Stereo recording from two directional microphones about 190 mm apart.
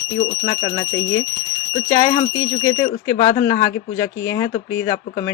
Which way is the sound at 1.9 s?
20° left (ahead or behind).